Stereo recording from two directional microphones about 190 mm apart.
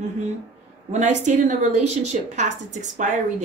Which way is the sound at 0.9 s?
40° right (ahead or behind).